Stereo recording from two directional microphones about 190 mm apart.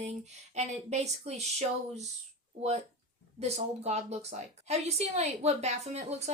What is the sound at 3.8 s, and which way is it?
Speech, 35° right (ahead or behind).